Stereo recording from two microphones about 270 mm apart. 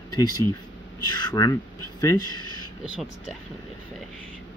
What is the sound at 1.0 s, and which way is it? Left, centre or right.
Speech, centre.